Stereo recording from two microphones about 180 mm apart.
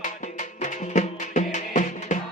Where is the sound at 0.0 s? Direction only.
45° left (ahead or behind).